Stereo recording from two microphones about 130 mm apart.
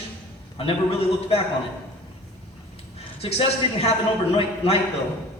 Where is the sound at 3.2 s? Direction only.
50° left (ahead or behind).